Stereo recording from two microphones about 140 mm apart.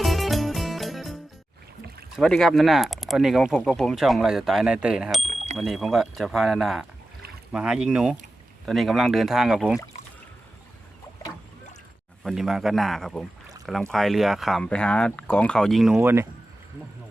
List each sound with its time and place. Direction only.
0.0 s music: centre (ahead or behind)
2.1 s speech: centre (ahead or behind)
5.3 s a sound: 55° right (ahead or behind)
5.5 s speech: centre (ahead or behind)
12.2 s speech: centre (ahead or behind)
16.0 s speech: 20° right (ahead or behind)